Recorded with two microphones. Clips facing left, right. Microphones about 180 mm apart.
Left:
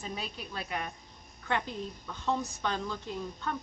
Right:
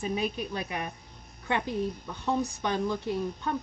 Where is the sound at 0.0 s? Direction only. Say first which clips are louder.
Right 9 dB; 15° right (ahead or behind).